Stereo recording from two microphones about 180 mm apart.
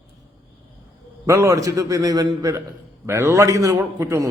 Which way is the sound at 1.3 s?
15° right (ahead or behind).